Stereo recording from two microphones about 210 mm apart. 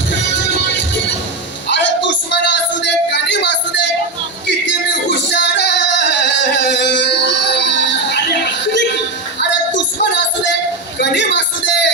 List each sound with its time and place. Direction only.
1.7 s music: 55° left (ahead or behind)
9.4 s music: 55° left (ahead or behind)